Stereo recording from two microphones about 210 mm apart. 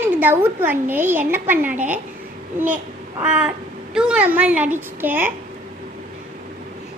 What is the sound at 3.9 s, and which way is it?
A woman's voice, 5° right (ahead or behind).